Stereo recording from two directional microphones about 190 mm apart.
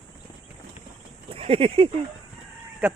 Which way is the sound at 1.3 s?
30° right (ahead or behind).